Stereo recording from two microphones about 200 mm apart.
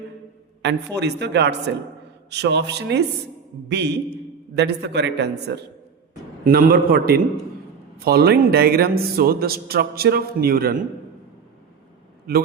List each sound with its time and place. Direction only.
0.6 s a woman's voice: 60° right (ahead or behind)
6.4 s speech: 45° right (ahead or behind)